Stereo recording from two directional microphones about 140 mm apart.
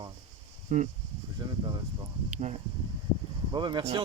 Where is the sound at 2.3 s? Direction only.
55° right (ahead or behind).